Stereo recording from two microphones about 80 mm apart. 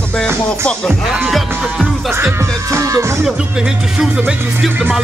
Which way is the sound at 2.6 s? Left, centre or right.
Right.